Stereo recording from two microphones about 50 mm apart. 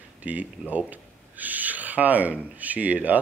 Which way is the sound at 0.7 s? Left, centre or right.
Right.